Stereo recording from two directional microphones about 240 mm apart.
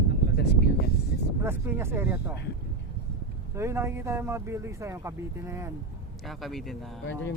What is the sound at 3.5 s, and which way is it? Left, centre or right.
Speech, centre.